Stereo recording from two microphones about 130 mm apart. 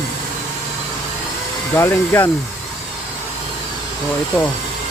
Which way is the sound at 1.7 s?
20° left (ahead or behind).